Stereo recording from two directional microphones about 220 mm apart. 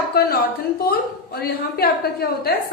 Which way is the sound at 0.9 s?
45° left (ahead or behind).